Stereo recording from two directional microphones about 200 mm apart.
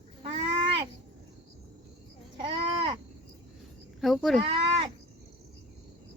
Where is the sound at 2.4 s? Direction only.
25° right (ahead or behind).